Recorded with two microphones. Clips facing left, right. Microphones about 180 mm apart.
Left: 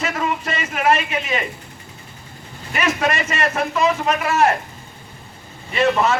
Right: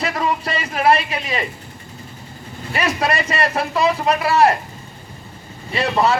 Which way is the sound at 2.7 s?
35° right (ahead or behind).